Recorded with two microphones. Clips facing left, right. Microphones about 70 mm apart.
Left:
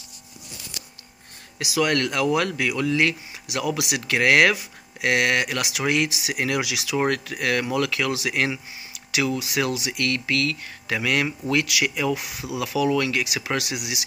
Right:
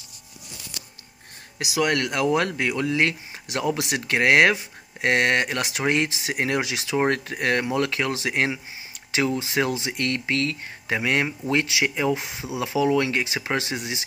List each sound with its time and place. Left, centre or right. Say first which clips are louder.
1.6 s speech: left 1 dB; right